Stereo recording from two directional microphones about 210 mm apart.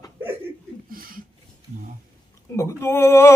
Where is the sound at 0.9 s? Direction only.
45° right (ahead or behind).